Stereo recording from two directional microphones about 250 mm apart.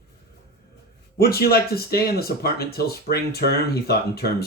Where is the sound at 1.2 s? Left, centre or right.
Left.